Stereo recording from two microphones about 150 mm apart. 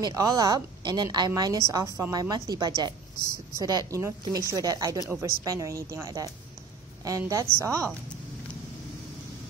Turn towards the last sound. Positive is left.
turn(degrees=-20)  # may be behind; listen again after turning